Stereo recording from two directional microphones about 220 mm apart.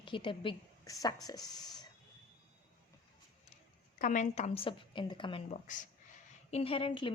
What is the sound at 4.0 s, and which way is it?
A woman's voice, 35° left (ahead or behind).